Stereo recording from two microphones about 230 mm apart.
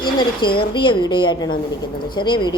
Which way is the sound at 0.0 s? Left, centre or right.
Centre.